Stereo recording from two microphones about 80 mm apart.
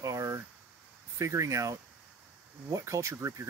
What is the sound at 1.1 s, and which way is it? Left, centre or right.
Speech, right.